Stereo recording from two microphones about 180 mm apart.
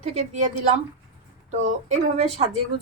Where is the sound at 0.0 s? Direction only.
40° right (ahead or behind).